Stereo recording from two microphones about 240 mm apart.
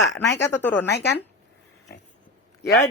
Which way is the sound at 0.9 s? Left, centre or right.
Left.